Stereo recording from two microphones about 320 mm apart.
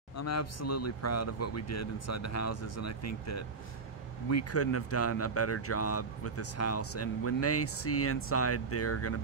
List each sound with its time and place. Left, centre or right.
0.1 s speech: left